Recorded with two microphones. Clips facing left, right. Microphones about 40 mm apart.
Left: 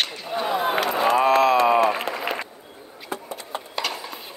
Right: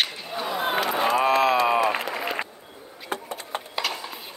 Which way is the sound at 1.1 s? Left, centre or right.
Centre.